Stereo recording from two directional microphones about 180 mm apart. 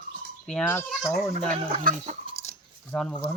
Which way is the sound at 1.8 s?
45° right (ahead or behind).